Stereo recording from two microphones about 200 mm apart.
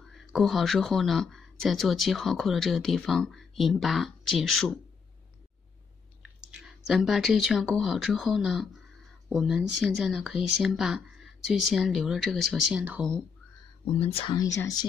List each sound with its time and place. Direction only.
0.1 s speech: centre (ahead or behind)
6.9 s speech: centre (ahead or behind)
13.9 s speech: 30° left (ahead or behind)